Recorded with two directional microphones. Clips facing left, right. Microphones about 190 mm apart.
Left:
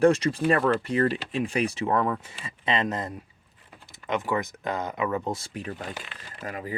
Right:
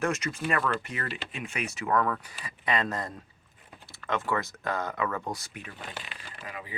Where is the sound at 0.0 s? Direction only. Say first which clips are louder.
Left 9 dB; 30° left (ahead or behind).